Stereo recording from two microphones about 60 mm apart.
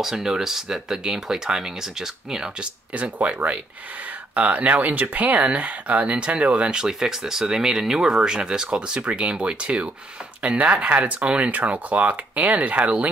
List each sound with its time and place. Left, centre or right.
0.0 s speech: centre
2.9 s speech: right